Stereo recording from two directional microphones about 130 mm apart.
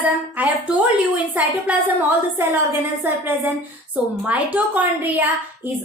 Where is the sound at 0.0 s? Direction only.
10° right (ahead or behind).